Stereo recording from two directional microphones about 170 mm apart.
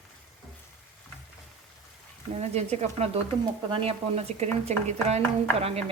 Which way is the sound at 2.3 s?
40° right (ahead or behind).